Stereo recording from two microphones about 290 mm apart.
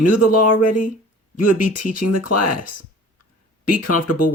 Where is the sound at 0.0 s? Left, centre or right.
Left.